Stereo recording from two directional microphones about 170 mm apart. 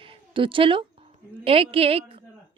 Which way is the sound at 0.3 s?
30° right (ahead or behind).